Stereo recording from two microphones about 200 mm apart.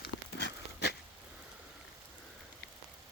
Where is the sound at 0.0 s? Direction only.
60° left (ahead or behind).